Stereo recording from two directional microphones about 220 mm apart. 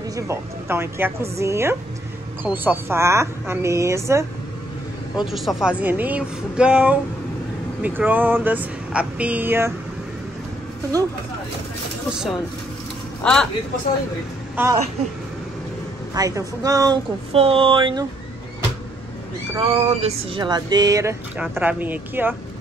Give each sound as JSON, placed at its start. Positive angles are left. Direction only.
{"t": 0.1, "sound": "speech", "side_deg": -10}
{"t": 5.2, "sound": "speech", "side_deg": 0}
{"t": 12.1, "sound": "speech", "side_deg": 0}
{"t": 14.6, "sound": "speech", "side_deg": -10}
{"t": 16.2, "sound": "speech", "side_deg": -15}
{"t": 19.5, "sound": "speech", "side_deg": -25}